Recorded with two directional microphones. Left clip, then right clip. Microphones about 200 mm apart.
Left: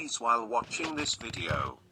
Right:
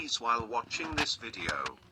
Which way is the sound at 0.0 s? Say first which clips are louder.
Left 2 dB; 30° left (ahead or behind).